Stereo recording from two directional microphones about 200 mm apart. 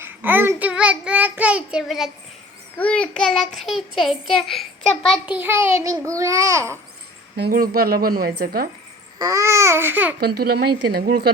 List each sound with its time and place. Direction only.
0.0 s child singing: 10° right (ahead or behind)
2.7 s a child's voice: 5° left (ahead or behind)
5.3 s a child's voice: 10° right (ahead or behind)
7.3 s speech: 50° right (ahead or behind)
9.1 s a child's voice: 15° right (ahead or behind)
10.2 s speech: 50° right (ahead or behind)